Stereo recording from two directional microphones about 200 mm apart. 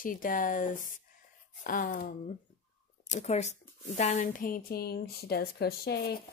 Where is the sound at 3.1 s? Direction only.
35° left (ahead or behind); by 6.1 s 55° left (ahead or behind).